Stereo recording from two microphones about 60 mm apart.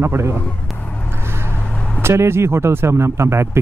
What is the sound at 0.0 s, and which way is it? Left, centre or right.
Speech, right.